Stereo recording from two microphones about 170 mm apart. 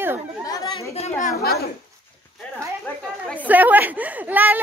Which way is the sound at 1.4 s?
70° left (ahead or behind).